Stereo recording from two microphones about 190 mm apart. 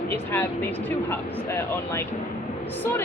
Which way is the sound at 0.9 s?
10° left (ahead or behind).